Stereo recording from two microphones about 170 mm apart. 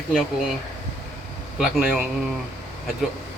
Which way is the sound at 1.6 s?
5° right (ahead or behind).